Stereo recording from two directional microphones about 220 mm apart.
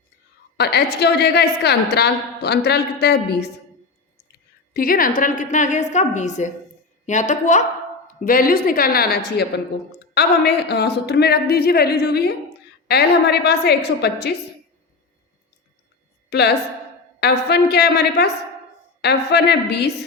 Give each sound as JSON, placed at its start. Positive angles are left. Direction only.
{"t": 0.5, "sound": "a woman's voice", "side_deg": 45}
{"t": 4.7, "sound": "a woman's voice", "side_deg": 40}
{"t": 16.3, "sound": "a woman's voice", "side_deg": 50}